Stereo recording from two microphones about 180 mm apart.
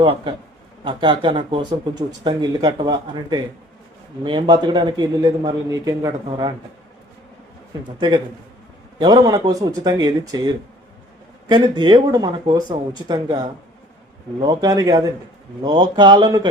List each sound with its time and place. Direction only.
0.0 s speech: 30° right (ahead or behind)
7.9 s speech: 25° right (ahead or behind)